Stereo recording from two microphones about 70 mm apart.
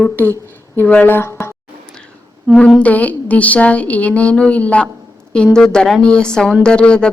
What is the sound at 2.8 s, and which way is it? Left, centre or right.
A woman's voice, left.